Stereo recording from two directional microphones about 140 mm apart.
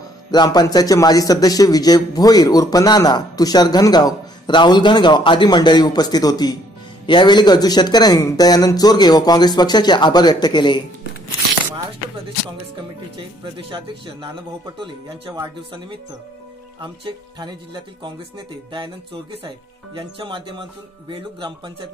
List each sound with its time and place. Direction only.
0.3 s a man's voice: 30° left (ahead or behind)
13.4 s a man's voice: 40° right (ahead or behind)
20.0 s a man's voice: 40° right (ahead or behind)